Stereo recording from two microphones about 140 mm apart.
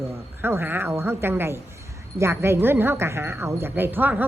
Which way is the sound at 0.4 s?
15° right (ahead or behind).